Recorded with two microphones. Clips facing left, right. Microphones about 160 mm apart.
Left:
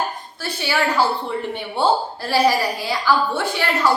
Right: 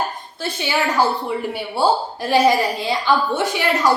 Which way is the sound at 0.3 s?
20° right (ahead or behind).